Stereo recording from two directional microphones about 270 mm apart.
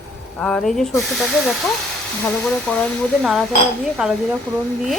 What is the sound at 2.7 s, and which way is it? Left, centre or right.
Speech, centre.